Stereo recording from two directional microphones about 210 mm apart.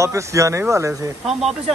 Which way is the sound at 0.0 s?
15° right (ahead or behind).